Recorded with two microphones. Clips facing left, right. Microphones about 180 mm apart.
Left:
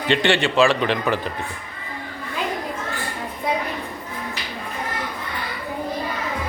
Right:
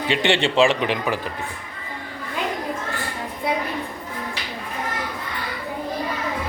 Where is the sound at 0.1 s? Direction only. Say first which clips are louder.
Left 2 dB; 20° right (ahead or behind).